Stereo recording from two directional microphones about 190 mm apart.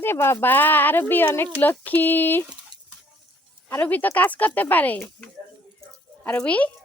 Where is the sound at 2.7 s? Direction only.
20° right (ahead or behind).